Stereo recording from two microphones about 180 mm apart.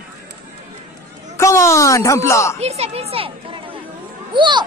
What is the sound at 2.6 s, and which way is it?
A child's voice, 35° right (ahead or behind).